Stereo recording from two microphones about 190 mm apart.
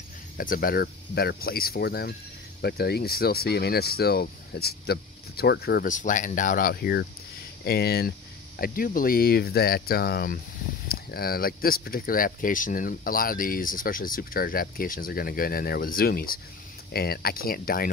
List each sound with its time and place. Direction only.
0.4 s speech: 50° left (ahead or behind)